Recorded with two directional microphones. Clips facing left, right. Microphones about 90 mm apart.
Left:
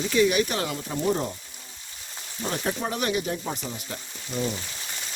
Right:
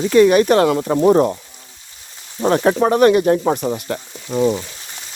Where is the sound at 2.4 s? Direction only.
70° right (ahead or behind).